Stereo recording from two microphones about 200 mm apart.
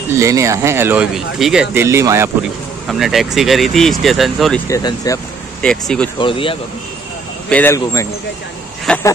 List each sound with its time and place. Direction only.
0.2 s speech: 15° right (ahead or behind)
2.9 s speech: centre (ahead or behind)
4.6 s a man's voice: 15° left (ahead or behind)
5.6 s speech: 5° left (ahead or behind)
6.1 s speech: 25° left (ahead or behind)
7.4 s a man's voice: 10° left (ahead or behind)
8.9 s speech: 5° left (ahead or behind)